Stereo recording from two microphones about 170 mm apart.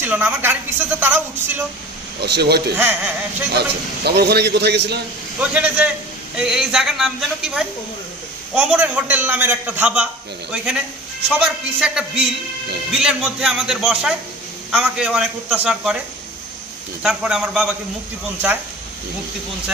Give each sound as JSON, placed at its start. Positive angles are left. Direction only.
{"t": 0.0, "sound": "a woman's voice", "side_deg": -10}
{"t": 2.2, "sound": "a man's voice", "side_deg": -75}
{"t": 5.4, "sound": "a woman's voice", "side_deg": -5}
{"t": 17.0, "sound": "speech", "side_deg": -5}